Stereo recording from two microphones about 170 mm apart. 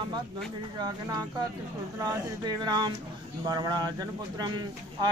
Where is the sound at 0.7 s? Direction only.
25° right (ahead or behind).